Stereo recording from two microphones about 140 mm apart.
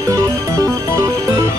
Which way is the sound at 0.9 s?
20° right (ahead or behind).